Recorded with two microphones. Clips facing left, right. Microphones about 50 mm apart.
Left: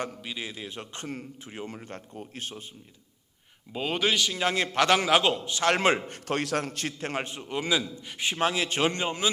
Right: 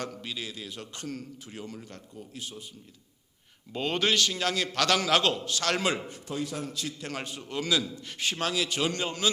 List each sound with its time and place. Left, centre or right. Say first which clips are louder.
0.2 s speech: left 1 dB; centre; by 2.6 s left
3.7 s speech: even; centre
4.4 s a man's voice: left 7 dB; left
6.1 s a man's voice: left 5 dB; left
7.1 s a man's voice: left 4 dB; left